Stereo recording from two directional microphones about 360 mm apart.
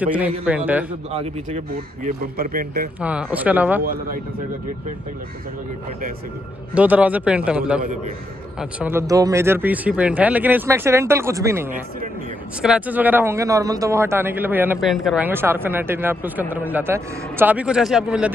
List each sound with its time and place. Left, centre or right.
0.0 s a man's voice: centre
1.1 s a man's voice: centre
3.0 s a man's voice: centre
6.7 s a man's voice: centre